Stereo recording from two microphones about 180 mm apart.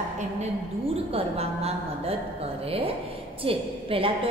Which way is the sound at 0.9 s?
35° right (ahead or behind).